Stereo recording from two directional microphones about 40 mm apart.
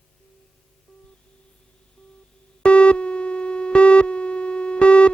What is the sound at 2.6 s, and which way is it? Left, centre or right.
Busy signal, left.